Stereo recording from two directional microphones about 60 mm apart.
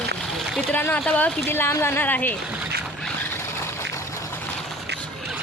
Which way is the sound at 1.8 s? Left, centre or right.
Left.